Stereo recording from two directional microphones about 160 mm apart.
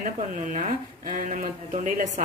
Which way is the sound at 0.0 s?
50° right (ahead or behind).